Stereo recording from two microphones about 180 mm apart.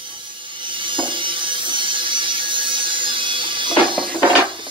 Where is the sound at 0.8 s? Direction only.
25° right (ahead or behind).